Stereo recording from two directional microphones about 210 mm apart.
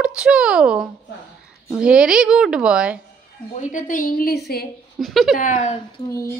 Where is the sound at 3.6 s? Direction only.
35° left (ahead or behind).